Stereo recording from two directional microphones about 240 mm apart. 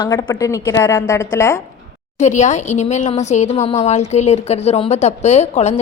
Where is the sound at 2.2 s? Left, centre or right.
Left.